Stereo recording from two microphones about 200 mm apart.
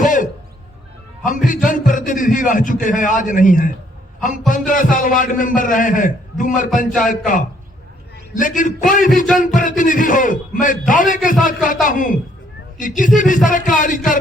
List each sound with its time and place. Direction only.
0.0 s music: 40° left (ahead or behind)
1.5 s a man's voice: 40° left (ahead or behind)
8.4 s a man's voice: 40° left (ahead or behind)